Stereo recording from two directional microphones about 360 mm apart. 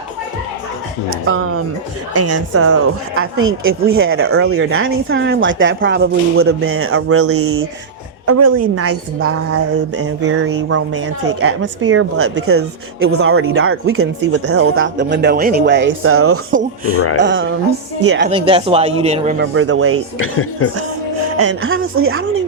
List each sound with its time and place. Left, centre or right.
1.3 s a woman's voice: right
18.2 s speech: centre
19.5 s a woman's voice: right
20.1 s speech: left
21.4 s a woman's voice: right